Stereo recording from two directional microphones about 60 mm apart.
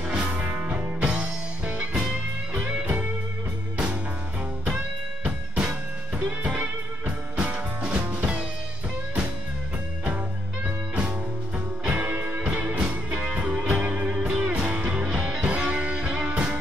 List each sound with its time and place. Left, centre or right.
0.1 s music: centre
4.6 s music: centre
11.9 s music: right
12.4 s music: centre
14.0 s music: centre